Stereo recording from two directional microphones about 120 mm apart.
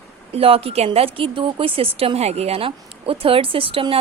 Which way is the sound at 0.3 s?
55° right (ahead or behind).